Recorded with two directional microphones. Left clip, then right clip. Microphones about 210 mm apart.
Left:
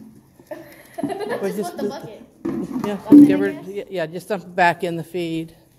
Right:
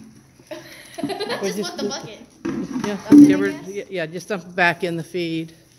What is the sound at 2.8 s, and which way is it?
Speech, 10° right (ahead or behind).